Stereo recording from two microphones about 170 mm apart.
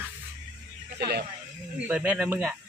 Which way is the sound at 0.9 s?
70° right (ahead or behind).